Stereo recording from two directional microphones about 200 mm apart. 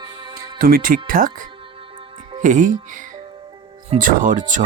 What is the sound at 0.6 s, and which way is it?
Speech, 45° right (ahead or behind).